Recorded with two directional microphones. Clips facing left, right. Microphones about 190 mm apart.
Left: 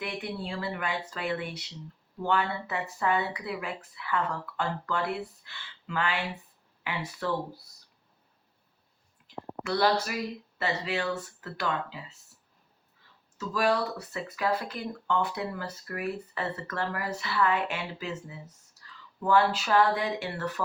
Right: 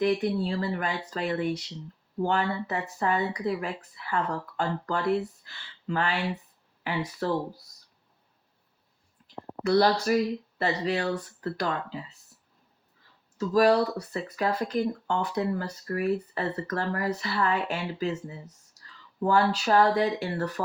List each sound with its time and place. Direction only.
0.0 s speech: 40° right (ahead or behind)
9.2 s a sound: 40° right (ahead or behind)
10.6 s speech: 40° right (ahead or behind)
13.5 s speech: 40° right (ahead or behind)
19.2 s speech: 40° right (ahead or behind)